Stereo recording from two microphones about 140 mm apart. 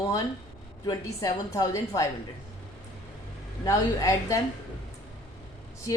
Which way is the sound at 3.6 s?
25° left (ahead or behind).